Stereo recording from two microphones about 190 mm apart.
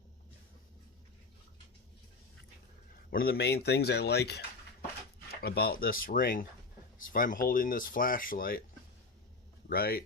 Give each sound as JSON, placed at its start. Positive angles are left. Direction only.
{"t": 3.1, "sound": "speech", "side_deg": 50}
{"t": 9.6, "sound": "speech", "side_deg": 55}